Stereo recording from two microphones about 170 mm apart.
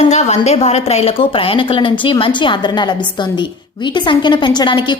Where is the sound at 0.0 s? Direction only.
40° left (ahead or behind).